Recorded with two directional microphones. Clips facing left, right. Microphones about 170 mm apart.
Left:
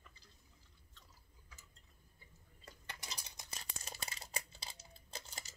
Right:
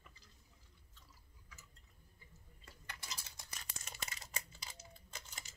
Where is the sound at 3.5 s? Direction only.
30° left (ahead or behind).